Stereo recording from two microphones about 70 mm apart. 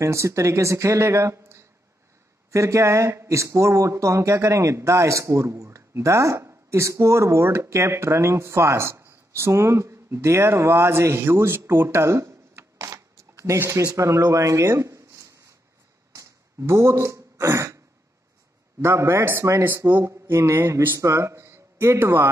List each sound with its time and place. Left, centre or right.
0.0 s speech: right
16.2 s throat clearing: right
18.8 s speech: right